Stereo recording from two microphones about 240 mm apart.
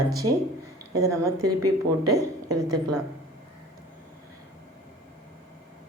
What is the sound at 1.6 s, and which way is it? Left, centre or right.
Speech, right.